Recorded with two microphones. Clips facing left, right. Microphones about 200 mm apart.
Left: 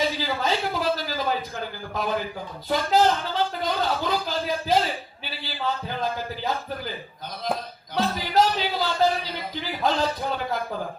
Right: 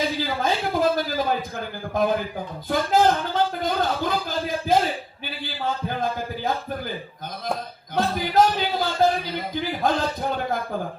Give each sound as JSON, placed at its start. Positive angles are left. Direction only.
{"t": 0.2, "sound": "a sound", "side_deg": -50}
{"t": 1.5, "sound": "speech", "side_deg": -50}
{"t": 7.9, "sound": "a man's voice", "side_deg": -50}